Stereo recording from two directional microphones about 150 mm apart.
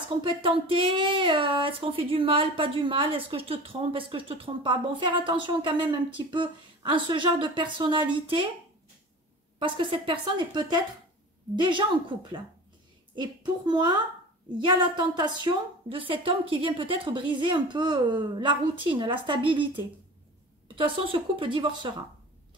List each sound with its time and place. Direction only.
0.2 s speech: 35° right (ahead or behind)
9.6 s a woman's voice: 35° right (ahead or behind)